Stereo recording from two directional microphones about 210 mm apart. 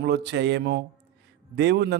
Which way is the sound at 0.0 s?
55° right (ahead or behind).